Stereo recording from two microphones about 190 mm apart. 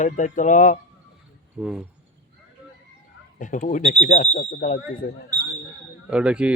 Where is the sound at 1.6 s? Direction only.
5° right (ahead or behind).